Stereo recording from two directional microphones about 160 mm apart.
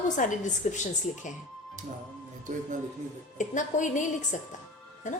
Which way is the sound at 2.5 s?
55° right (ahead or behind).